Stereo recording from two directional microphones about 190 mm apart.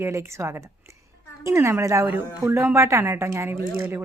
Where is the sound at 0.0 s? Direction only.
15° right (ahead or behind).